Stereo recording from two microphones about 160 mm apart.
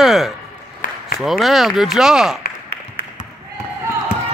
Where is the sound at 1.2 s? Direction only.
Centre (ahead or behind).